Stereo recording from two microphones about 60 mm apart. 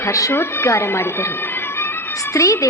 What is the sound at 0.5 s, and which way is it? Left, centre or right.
Speech, left.